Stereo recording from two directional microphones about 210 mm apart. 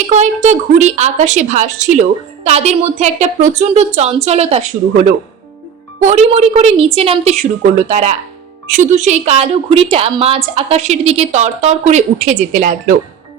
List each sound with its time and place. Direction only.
0.1 s a woman's voice: 35° right (ahead or behind)